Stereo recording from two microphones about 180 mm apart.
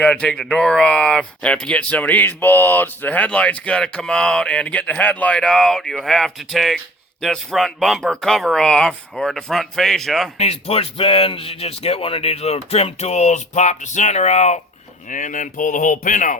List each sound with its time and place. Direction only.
0.0 s speech: 5° left (ahead or behind)
10.3 s speech: 35° left (ahead or behind)